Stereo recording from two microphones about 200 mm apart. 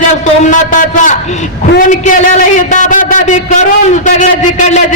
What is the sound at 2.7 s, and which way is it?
A woman's voice, 40° left (ahead or behind).